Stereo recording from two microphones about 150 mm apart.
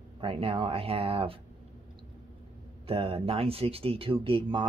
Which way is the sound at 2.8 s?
40° right (ahead or behind).